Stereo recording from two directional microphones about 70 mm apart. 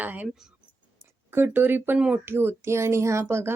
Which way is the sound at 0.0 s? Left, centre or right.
Right.